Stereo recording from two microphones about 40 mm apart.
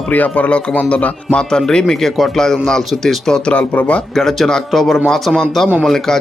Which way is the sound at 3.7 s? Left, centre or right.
Left.